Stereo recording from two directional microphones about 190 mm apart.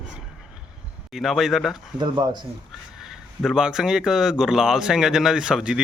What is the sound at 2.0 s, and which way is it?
Speech, 25° right (ahead or behind).